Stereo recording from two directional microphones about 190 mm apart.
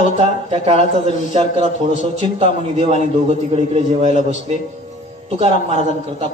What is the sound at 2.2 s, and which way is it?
A man's voice, 35° right (ahead or behind).